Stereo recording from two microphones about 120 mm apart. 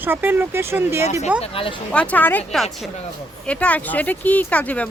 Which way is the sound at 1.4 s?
50° left (ahead or behind).